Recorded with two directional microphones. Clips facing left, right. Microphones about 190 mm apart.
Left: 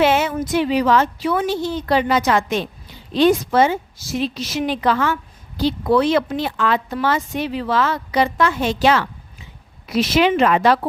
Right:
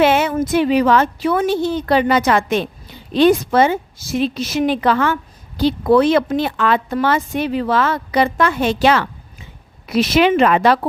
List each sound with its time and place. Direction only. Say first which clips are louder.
0.0 s speech: right 3 dB; 55° right (ahead or behind)